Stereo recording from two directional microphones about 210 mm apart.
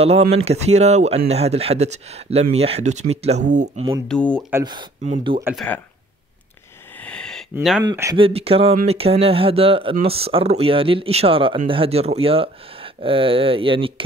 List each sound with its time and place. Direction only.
0.3 s speech: 30° right (ahead or behind)
4.1 s speech: 5° left (ahead or behind)
4.5 s speech: 15° right (ahead or behind)
5.0 s speech: 30° right (ahead or behind)
5.4 s speech: 5° right (ahead or behind)
7.0 s a sound: 5° left (ahead or behind)
7.5 s speech: 5° right (ahead or behind)
7.8 s speech: 15° right (ahead or behind)
8.2 s speech: 30° right (ahead or behind)